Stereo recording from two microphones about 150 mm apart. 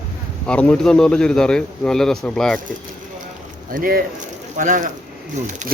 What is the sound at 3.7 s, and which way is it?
Speech, 70° right (ahead or behind).